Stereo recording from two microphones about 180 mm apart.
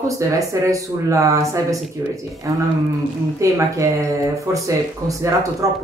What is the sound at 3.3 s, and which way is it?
Speech, 15° right (ahead or behind).